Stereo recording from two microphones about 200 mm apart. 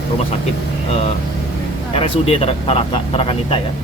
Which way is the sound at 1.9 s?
30° left (ahead or behind).